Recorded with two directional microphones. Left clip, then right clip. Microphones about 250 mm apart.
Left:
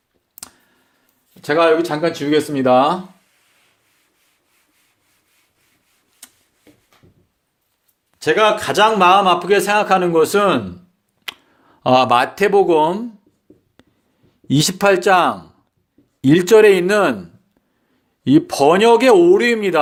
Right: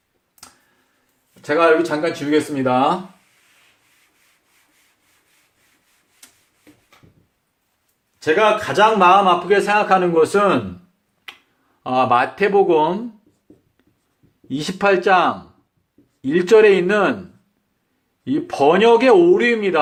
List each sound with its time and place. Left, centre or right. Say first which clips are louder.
0.4 s clicking: left 5 dB; left
1.4 s a man's voice: left 1 dB; left
8.2 s a man's voice: left 1 dB; left
11.3 s finger snapping: left 7 dB; left
11.8 s a man's voice: left 3 dB; left
13.8 s writing: left 8 dB; left
14.4 s a man's voice: left 4 dB; left
18.3 s a man's voice: left 3 dB; left